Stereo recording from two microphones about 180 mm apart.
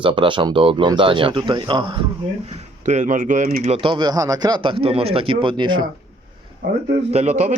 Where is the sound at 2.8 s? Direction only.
40° right (ahead or behind); by 5.8 s 25° right (ahead or behind).